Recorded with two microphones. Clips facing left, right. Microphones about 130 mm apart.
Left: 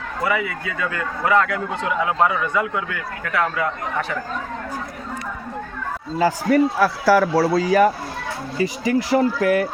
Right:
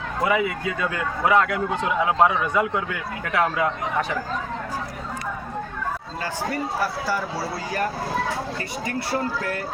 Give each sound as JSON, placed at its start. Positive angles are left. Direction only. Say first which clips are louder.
{"t": 0.3, "sound": "a man's voice", "louder": "right 1 dB", "side_deg": -20}
{"t": 6.5, "sound": "a man's voice", "louder": "left 9 dB", "side_deg": 90}